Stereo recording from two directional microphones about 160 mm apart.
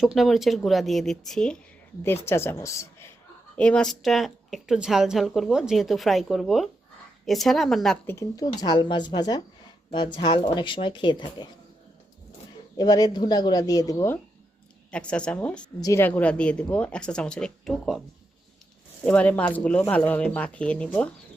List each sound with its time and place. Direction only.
0.0 s speech: centre (ahead or behind)
2.0 s speech: 15° left (ahead or behind)
3.6 s speech: 5° left (ahead or behind)
8.0 s speech: 20° left (ahead or behind)
12.7 s speech: 25° left (ahead or behind)
14.8 s speech: 5° left (ahead or behind)
19.0 s speech: 10° left (ahead or behind)